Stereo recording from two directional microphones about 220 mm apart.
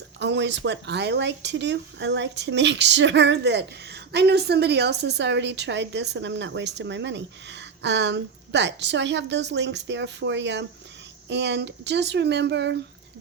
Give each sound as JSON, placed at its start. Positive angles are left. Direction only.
{"t": 0.2, "sound": "speech", "side_deg": -55}